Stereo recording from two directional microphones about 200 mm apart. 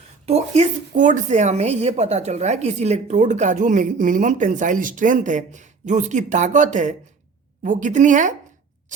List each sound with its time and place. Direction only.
0.3 s speech: 35° right (ahead or behind)